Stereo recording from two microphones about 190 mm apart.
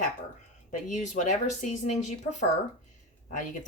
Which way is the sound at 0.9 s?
40° left (ahead or behind).